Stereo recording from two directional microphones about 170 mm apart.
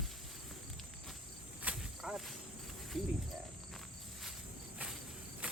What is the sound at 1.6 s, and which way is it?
Cricket, 5° right (ahead or behind).